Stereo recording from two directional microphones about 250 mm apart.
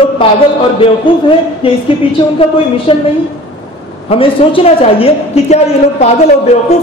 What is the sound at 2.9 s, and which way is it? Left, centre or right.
Speech, left.